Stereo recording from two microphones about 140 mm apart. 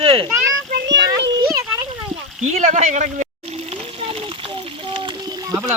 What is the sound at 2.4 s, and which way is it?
Speech, 55° right (ahead or behind).